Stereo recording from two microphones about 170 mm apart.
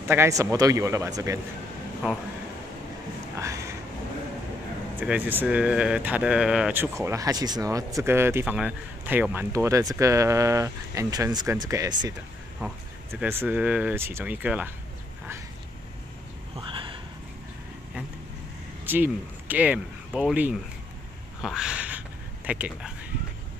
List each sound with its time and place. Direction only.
0.1 s speech: 15° right (ahead or behind)
3.3 s a sound: 15° right (ahead or behind)
4.9 s speech: 10° right (ahead or behind)
13.1 s speech: 15° right (ahead or behind)
16.5 s a sound: 30° right (ahead or behind)
18.9 s speech: 10° right (ahead or behind)